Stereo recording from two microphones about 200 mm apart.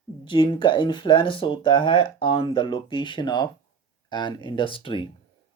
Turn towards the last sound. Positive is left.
turn(degrees=25)  # may be behind; listen again after turning